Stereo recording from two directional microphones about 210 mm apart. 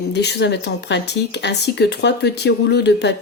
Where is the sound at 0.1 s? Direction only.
55° left (ahead or behind).